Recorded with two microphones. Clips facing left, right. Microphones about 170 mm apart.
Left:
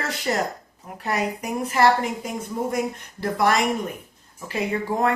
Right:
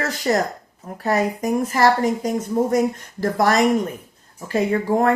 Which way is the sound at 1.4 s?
40° right (ahead or behind).